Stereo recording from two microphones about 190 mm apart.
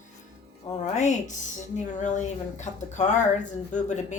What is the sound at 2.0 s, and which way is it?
Speech, 40° left (ahead or behind).